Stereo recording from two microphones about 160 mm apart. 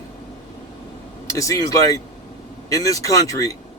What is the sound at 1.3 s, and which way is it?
Speech, 20° left (ahead or behind).